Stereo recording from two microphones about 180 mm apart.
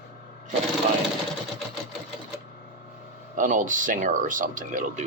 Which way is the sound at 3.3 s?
45° right (ahead or behind).